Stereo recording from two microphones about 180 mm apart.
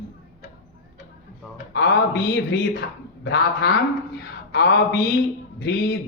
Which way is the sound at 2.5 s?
65° left (ahead or behind).